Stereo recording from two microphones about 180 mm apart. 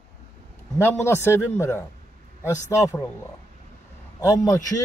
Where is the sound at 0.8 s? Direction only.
15° left (ahead or behind).